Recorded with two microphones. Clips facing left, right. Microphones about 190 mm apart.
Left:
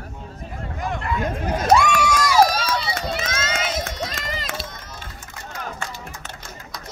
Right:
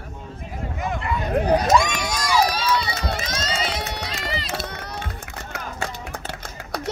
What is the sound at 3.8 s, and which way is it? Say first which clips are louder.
Run: left 2 dB; 70° right (ahead or behind).